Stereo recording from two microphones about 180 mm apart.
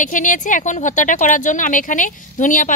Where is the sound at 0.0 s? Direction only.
45° left (ahead or behind).